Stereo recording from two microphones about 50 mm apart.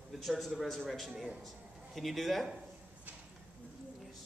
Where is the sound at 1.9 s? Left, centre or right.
Centre.